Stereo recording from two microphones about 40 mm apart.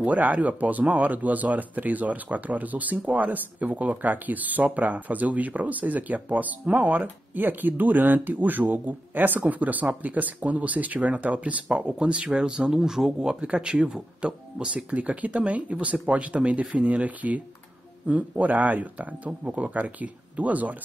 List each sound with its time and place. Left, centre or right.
0.0 s speech: right
7.3 s speech: right
12.7 s speech: centre
13.4 s speech: right
18.5 s speech: right